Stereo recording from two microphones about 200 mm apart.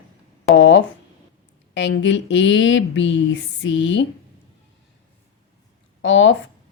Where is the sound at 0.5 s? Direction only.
70° left (ahead or behind).